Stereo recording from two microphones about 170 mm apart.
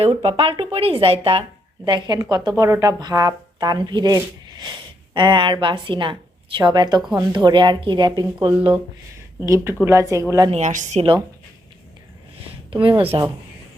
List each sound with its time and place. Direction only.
0.0 s speech: 35° right (ahead or behind)
9.4 s speech: 15° right (ahead or behind)
10.5 s a woman's voice: 45° right (ahead or behind)
13.0 s speech: 30° right (ahead or behind)